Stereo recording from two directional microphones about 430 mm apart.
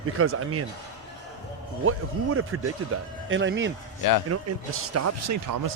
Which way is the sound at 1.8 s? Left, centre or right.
Right.